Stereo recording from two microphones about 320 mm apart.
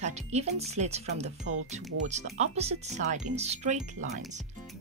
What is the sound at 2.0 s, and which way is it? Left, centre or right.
Speech, right.